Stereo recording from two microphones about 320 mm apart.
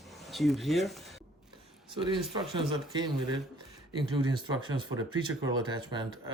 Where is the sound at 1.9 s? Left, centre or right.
Centre.